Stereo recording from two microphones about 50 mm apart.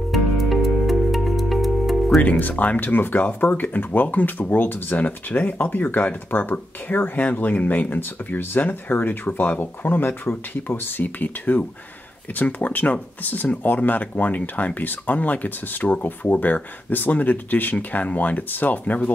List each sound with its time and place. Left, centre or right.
0.1 s music: centre
2.2 s speech: left